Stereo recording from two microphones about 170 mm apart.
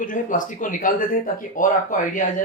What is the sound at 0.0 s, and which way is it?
Speech, 50° left (ahead or behind).